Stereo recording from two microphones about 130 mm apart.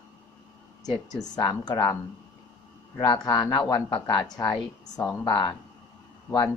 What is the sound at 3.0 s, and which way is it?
Speech, 30° left (ahead or behind).